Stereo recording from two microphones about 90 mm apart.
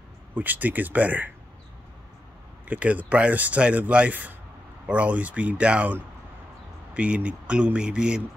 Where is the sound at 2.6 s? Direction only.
15° right (ahead or behind).